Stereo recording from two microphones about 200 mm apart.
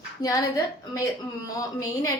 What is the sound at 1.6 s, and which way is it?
Speech, 15° left (ahead or behind).